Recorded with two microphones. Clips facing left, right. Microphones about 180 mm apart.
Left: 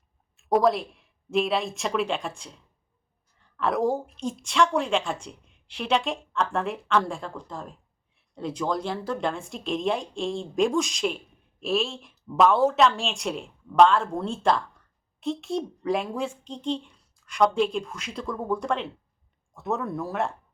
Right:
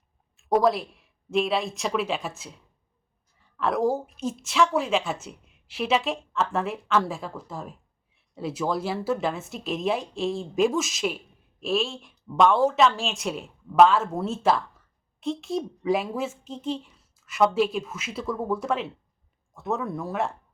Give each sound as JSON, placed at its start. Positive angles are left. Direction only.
{"t": 0.3, "sound": "speech", "side_deg": 0}
{"t": 3.6, "sound": "a woman's voice", "side_deg": 0}